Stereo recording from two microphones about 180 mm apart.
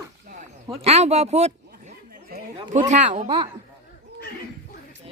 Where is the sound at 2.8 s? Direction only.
40° right (ahead or behind).